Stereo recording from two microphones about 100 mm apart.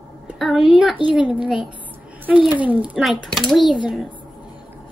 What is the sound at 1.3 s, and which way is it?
A woman's voice, 10° right (ahead or behind).